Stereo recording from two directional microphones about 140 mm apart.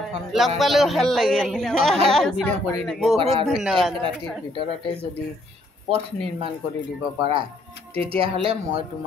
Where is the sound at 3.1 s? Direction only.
45° right (ahead or behind).